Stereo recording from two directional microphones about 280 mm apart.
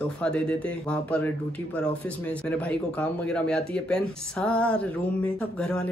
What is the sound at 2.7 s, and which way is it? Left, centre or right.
Speech, centre.